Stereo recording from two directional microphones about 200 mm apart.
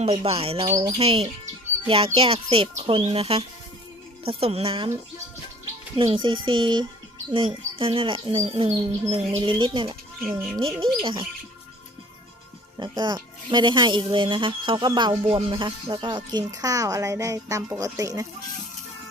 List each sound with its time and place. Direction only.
0.0 s speech: 30° right (ahead or behind)
6.0 s speech: 25° right (ahead or behind)
10.2 s speech: 10° right (ahead or behind)
11.0 s speech: 25° right (ahead or behind)
12.7 s speech: 20° right (ahead or behind)